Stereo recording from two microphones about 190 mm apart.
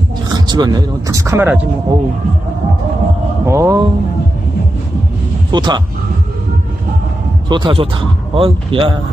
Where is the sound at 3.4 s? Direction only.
15° right (ahead or behind).